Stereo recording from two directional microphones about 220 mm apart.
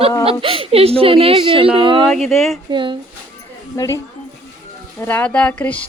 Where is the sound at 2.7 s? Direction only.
20° right (ahead or behind).